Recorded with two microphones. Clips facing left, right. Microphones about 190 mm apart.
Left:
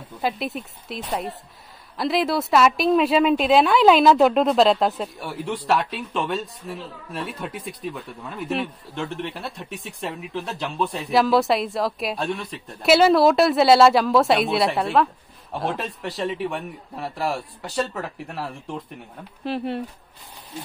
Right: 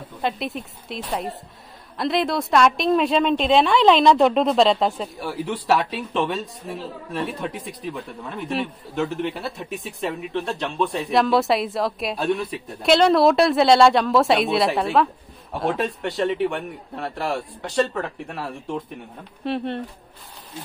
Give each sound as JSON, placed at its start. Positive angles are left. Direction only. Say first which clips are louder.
{"t": 0.2, "sound": "a woman's voice", "louder": "even", "side_deg": 0}
{"t": 12.8, "sound": "a woman's voice", "louder": "even", "side_deg": 5}